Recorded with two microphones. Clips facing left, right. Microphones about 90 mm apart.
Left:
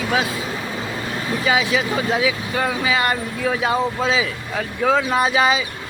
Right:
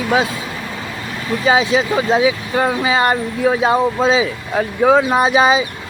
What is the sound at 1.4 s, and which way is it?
Speech, 25° right (ahead or behind).